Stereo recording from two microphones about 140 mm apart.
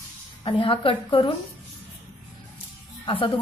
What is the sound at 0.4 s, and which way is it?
Speech, 40° left (ahead or behind).